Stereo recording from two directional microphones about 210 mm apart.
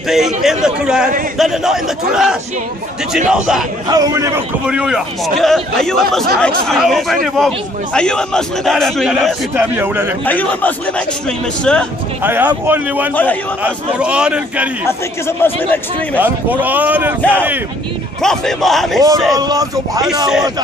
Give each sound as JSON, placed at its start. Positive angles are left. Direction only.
{"t": 0.1, "sound": "a man's voice", "side_deg": 0}
{"t": 3.9, "sound": "speech", "side_deg": -15}
{"t": 4.6, "sound": "a man's voice", "side_deg": -5}
{"t": 10.2, "sound": "a man's voice", "side_deg": 10}
{"t": 12.2, "sound": "speech", "side_deg": -10}
{"t": 13.1, "sound": "speech", "side_deg": 10}
{"t": 13.7, "sound": "a man's voice", "side_deg": -5}
{"t": 14.9, "sound": "speech", "side_deg": 10}
{"t": 16.2, "sound": "speech", "side_deg": -10}
{"t": 18.2, "sound": "a man's voice", "side_deg": 0}
{"t": 19.3, "sound": "speech", "side_deg": -15}